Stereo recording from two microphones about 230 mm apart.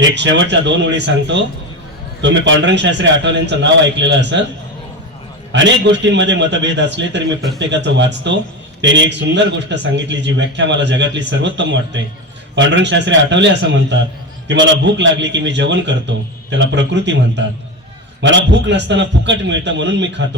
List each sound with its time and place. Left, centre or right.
0.0 s a man's voice: right
5.5 s a man's voice: right